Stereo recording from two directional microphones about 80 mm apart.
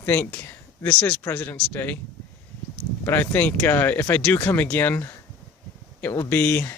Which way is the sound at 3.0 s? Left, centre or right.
Left.